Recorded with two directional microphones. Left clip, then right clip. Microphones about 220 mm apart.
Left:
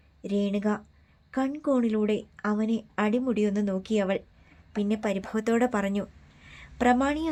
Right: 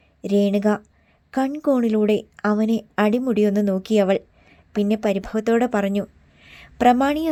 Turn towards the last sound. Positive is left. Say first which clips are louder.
# right 7 dB
turn(degrees=-20)  # may be behind; listen again after turning